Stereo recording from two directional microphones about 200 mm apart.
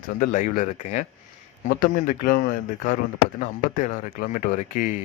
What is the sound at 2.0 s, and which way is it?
Speech, 45° left (ahead or behind).